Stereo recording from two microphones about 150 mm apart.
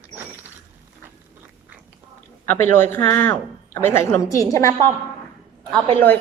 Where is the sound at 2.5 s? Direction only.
15° left (ahead or behind).